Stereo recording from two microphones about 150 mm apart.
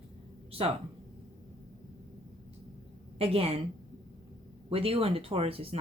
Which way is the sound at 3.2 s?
40° right (ahead or behind).